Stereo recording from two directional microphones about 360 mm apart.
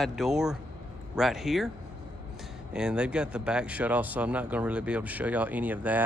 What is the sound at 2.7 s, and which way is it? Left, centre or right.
Speech, centre.